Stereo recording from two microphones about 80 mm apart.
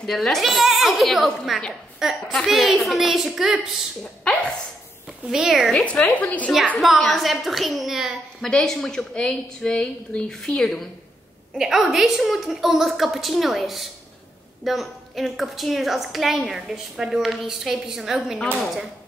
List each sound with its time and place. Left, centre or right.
0.0 s a woman's voice: centre
4.0 s speech: centre
5.2 s a woman's voice: centre
5.7 s a woman's voice: centre
6.8 s a woman's voice: centre
8.4 s a woman's voice: centre
11.5 s a woman's voice: centre